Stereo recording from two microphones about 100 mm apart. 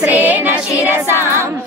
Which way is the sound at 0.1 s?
15° right (ahead or behind).